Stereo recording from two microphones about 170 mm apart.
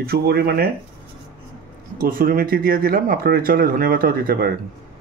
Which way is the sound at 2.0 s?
55° right (ahead or behind).